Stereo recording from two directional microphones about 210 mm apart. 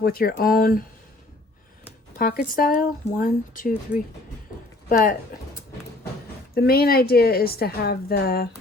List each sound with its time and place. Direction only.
0.0 s a woman's voice: 45° left (ahead or behind)
2.1 s speech: 45° left (ahead or behind)
6.5 s a woman's voice: 45° left (ahead or behind)